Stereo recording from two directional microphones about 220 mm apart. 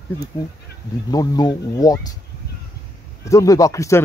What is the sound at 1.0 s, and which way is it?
Speech, 15° left (ahead or behind).